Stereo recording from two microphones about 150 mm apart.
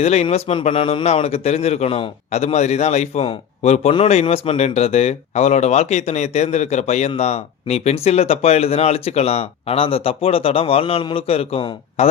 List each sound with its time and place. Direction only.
0.0 s a man's voice: 45° left (ahead or behind)